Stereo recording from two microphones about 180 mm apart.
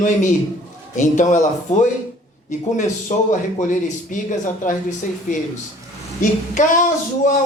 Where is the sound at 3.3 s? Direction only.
45° left (ahead or behind).